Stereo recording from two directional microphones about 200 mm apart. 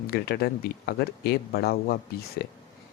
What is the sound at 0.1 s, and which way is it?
Speech, 55° left (ahead or behind).